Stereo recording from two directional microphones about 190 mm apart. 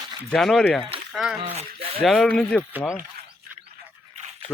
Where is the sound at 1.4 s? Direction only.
30° right (ahead or behind).